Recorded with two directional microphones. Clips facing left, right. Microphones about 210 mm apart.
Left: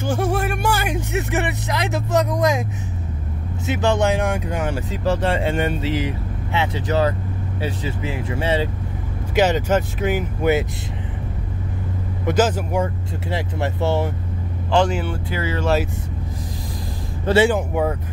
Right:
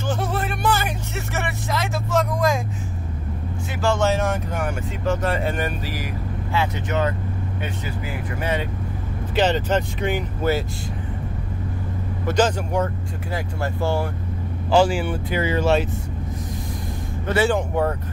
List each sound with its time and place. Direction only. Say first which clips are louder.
0.0 s speech: left 4 dB; 10° left (ahead or behind)
3.6 s speech: left 2 dB; 20° left (ahead or behind)
4.6 s speech: left 3 dB; 30° left (ahead or behind)
6.9 s speech: left 3 dB; 35° left (ahead or behind)
9.3 s speech: left 2 dB; 10° left (ahead or behind)
12.3 s speech: left 2 dB; 5° left (ahead or behind)
13.3 s speech: left 3 dB; 20° left (ahead or behind)
14.7 s speech: right 1 dB; 5° right (ahead or behind)
15.2 s speech: right 3 dB; 20° right (ahead or behind)
15.6 s speech: left 1 dB; centre (ahead or behind)
17.5 s speech: left 1 dB; 10° left (ahead or behind)